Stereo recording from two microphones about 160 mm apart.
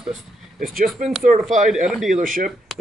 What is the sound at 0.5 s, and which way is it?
Speech, 65° right (ahead or behind).